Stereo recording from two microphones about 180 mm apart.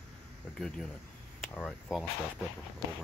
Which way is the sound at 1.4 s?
5° left (ahead or behind).